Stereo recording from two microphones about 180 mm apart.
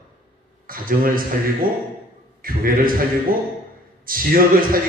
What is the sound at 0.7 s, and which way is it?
A man's voice, 50° right (ahead or behind).